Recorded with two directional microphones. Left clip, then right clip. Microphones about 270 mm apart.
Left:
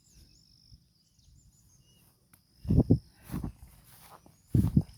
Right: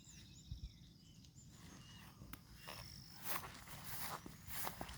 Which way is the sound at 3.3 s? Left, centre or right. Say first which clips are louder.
Left 3 dB; right.